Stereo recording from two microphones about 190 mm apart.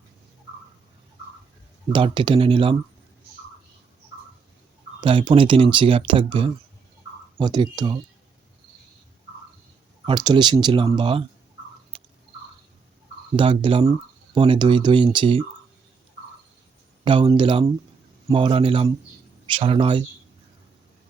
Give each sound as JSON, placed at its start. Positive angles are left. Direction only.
{"t": 1.9, "sound": "speech", "side_deg": -25}
{"t": 4.9, "sound": "speech", "side_deg": -25}
{"t": 10.1, "sound": "speech", "side_deg": -25}
{"t": 11.9, "sound": "a sound", "side_deg": -30}
{"t": 13.3, "sound": "speech", "side_deg": -25}
{"t": 17.0, "sound": "speech", "side_deg": -25}